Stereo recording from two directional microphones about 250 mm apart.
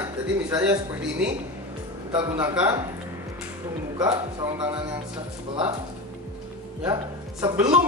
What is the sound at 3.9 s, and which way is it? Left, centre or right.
Speech, centre.